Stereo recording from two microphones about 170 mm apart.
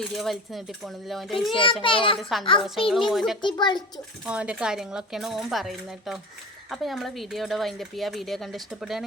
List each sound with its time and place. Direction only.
0.2 s speech: centre (ahead or behind)
1.8 s a child's voice: 30° left (ahead or behind)
2.6 s speech: centre (ahead or behind)
3.4 s a child's voice: 25° left (ahead or behind)
4.3 s speech: 5° right (ahead or behind)